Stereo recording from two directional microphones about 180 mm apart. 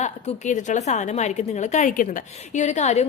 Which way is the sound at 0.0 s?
40° left (ahead or behind).